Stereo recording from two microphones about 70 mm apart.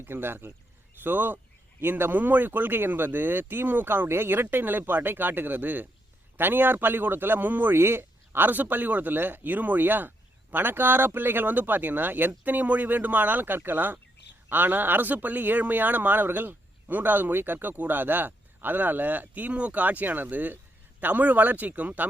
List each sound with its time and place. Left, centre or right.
0.0 s speech: right